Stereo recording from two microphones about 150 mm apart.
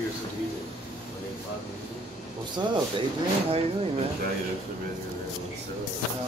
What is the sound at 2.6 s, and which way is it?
Speech, 30° right (ahead or behind).